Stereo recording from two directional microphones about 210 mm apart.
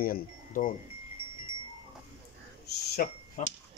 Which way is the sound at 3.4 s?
40° left (ahead or behind).